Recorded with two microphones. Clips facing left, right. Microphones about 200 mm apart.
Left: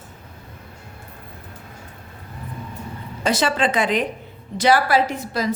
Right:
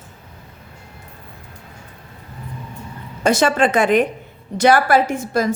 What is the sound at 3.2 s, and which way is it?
A woman's voice, 50° right (ahead or behind).